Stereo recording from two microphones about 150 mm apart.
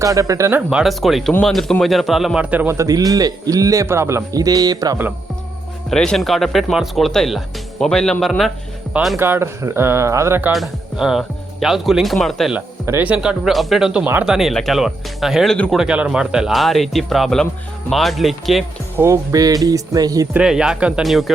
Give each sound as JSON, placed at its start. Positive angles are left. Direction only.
{"t": 0.0, "sound": "a man's voice", "side_deg": -20}
{"t": 0.7, "sound": "a man's voice", "side_deg": -5}
{"t": 5.9, "sound": "speech", "side_deg": 5}
{"t": 9.1, "sound": "speech", "side_deg": -15}
{"t": 10.5, "sound": "speech", "side_deg": 0}
{"t": 12.5, "sound": "speech", "side_deg": -15}
{"t": 15.5, "sound": "speech", "side_deg": 10}
{"t": 15.8, "sound": "speech", "side_deg": -10}
{"t": 18.9, "sound": "a man's voice", "side_deg": -20}
{"t": 20.3, "sound": "speech", "side_deg": -5}